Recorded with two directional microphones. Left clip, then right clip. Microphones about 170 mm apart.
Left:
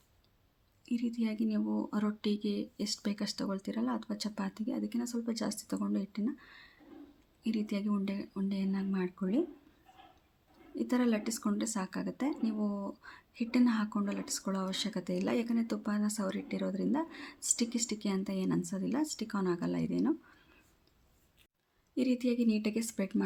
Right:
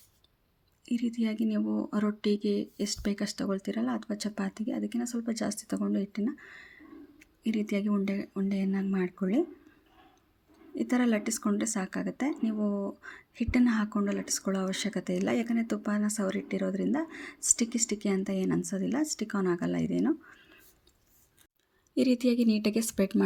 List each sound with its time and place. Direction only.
0.9 s speech: 20° right (ahead or behind)
10.8 s speech: 20° right (ahead or behind)
21.9 s a woman's voice: 35° right (ahead or behind)